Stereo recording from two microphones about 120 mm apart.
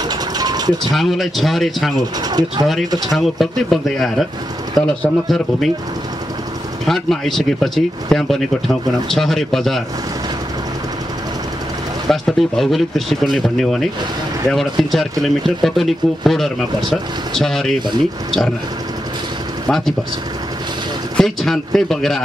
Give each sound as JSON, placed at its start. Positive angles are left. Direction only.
{"t": 0.1, "sound": "vehicle", "side_deg": -35}
{"t": 0.9, "sound": "speech", "side_deg": 0}
{"t": 2.2, "sound": "speech", "side_deg": -35}
{"t": 2.6, "sound": "speech", "side_deg": 0}
{"t": 6.9, "sound": "speech", "side_deg": 5}
{"t": 12.1, "sound": "speech", "side_deg": 0}
{"t": 21.2, "sound": "speech", "side_deg": 5}